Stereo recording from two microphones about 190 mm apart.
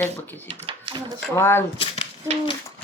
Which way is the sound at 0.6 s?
25° right (ahead or behind).